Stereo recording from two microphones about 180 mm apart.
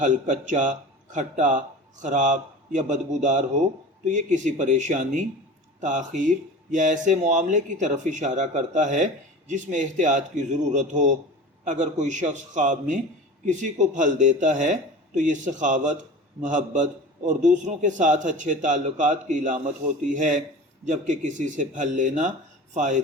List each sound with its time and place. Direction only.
0.0 s speech: 45° right (ahead or behind)